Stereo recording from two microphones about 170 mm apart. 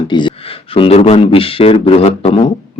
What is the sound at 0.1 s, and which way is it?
A man's voice, 30° left (ahead or behind).